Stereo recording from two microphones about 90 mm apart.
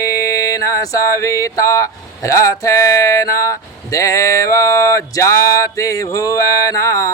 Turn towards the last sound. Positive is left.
turn(degrees=35)  # may be behind; listen again after turning